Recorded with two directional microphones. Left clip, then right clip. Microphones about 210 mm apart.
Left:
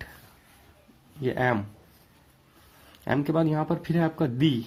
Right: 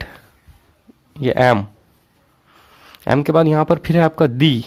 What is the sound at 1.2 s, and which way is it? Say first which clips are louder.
Speech: right 12 dB; 50° right (ahead or behind).